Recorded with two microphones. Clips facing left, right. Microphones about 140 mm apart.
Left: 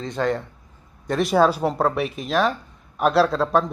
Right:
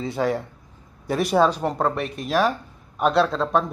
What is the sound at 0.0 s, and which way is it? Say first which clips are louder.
A man's voice: even; 5° right (ahead or behind).